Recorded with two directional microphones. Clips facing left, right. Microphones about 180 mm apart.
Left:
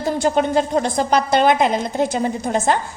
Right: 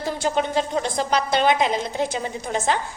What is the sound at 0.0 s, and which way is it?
A woman's voice, 45° left (ahead or behind).